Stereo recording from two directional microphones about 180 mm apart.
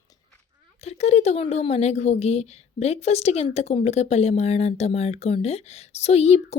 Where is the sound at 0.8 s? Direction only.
35° left (ahead or behind).